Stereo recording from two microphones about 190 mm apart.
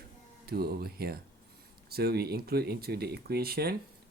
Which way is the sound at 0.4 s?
55° right (ahead or behind).